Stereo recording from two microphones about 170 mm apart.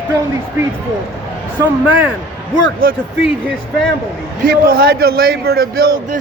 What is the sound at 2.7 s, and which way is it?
Speech, 55° right (ahead or behind).